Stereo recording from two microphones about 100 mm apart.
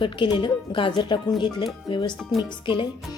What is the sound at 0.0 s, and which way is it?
Speech, 55° left (ahead or behind).